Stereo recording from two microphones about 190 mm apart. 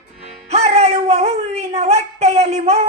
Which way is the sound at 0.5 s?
35° right (ahead or behind).